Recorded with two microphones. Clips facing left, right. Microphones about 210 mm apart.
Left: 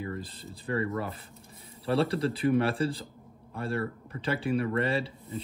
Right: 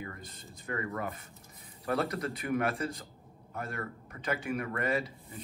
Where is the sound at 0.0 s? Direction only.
30° left (ahead or behind).